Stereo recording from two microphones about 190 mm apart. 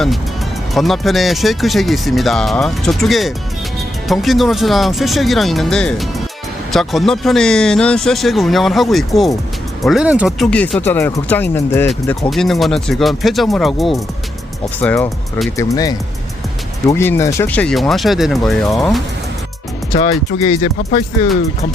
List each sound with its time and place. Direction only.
0.7 s speech: centre (ahead or behind)
12.3 s speech: centre (ahead or behind)
14.8 s speech: 10° left (ahead or behind)
19.9 s speech: 35° left (ahead or behind)